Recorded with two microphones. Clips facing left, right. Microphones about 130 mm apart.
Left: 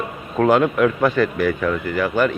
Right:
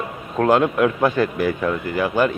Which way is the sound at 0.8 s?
10° right (ahead or behind).